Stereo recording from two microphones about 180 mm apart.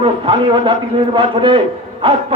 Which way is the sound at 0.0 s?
30° right (ahead or behind).